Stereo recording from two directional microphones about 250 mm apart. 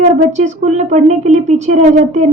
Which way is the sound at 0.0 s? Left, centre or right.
Right.